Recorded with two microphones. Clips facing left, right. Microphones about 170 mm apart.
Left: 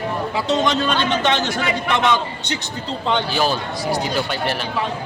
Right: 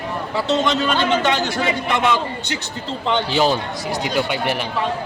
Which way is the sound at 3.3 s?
20° right (ahead or behind).